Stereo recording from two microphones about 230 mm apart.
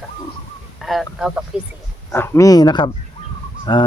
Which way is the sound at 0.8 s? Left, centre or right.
Centre.